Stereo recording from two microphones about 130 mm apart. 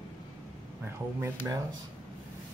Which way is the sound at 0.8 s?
20° right (ahead or behind).